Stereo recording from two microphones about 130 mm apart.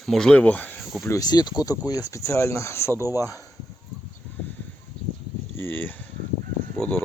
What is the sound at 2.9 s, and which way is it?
Speech, 20° right (ahead or behind).